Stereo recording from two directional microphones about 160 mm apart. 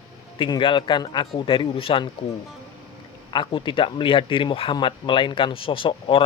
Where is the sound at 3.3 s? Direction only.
30° left (ahead or behind).